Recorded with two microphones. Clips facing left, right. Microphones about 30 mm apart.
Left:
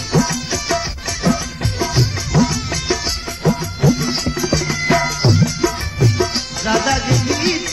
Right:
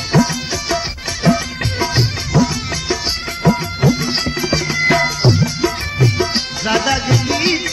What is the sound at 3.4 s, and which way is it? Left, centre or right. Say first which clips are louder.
Music: right 2 dB; right.